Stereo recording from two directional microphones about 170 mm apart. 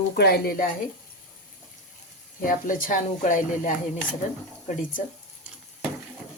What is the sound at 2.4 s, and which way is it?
Speech, 55° left (ahead or behind).